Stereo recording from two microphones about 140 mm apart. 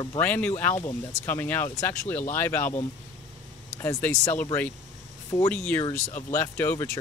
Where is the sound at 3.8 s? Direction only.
15° left (ahead or behind).